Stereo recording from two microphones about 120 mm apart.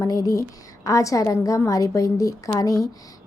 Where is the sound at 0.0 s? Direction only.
30° left (ahead or behind).